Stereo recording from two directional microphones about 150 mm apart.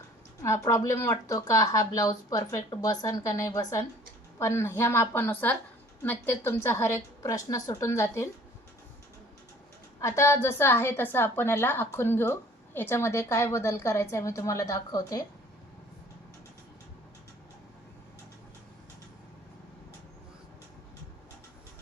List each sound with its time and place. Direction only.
0.4 s a woman's voice: 20° left (ahead or behind)
10.0 s a woman's voice: 20° left (ahead or behind)